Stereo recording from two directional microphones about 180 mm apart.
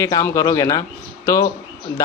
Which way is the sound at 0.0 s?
20° left (ahead or behind).